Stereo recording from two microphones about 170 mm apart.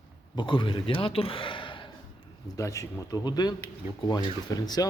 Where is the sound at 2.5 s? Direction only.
20° left (ahead or behind).